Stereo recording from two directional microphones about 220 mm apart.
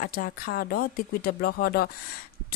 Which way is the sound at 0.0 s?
40° left (ahead or behind).